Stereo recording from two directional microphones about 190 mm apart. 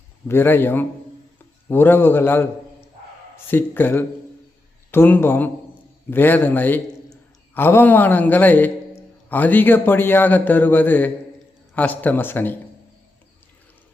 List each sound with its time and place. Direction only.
0.3 s a man's voice: 10° left (ahead or behind)
3.5 s a man's voice: 10° left (ahead or behind)